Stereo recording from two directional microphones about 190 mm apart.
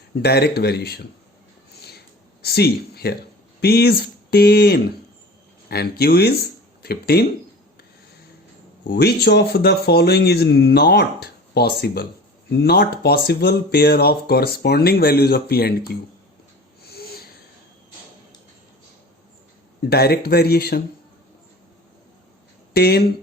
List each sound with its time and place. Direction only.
0.2 s speech: 60° left (ahead or behind)
2.4 s speech: 55° left (ahead or behind)
8.9 s speech: 60° left (ahead or behind)
16.8 s a sound: 55° left (ahead or behind)
19.8 s speech: 55° left (ahead or behind)
22.7 s speech: 55° left (ahead or behind)